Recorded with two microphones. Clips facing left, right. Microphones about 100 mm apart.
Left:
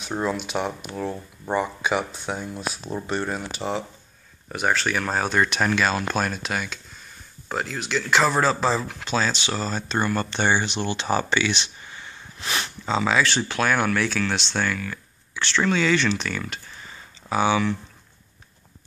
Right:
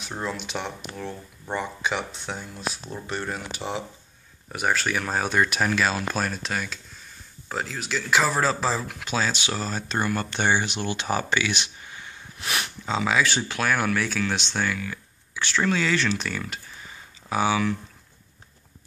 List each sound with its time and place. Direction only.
0.5 s speech: 10° left (ahead or behind)
3.6 s speech: 25° left (ahead or behind)
4.5 s speech: 5° right (ahead or behind)